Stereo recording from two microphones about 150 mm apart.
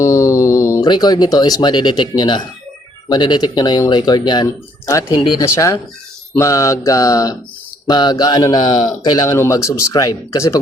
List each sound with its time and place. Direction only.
0.0 s speech: 20° left (ahead or behind)